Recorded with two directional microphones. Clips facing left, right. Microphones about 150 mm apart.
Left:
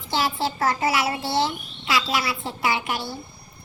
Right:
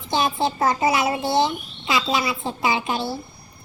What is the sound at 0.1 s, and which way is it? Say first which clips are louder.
A child's voice: right 3 dB; 20° right (ahead or behind).